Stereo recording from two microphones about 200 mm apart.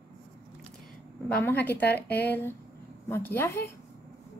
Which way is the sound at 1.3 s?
10° left (ahead or behind).